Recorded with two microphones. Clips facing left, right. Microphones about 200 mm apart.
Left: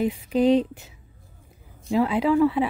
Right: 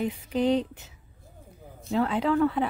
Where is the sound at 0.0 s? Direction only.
10° left (ahead or behind).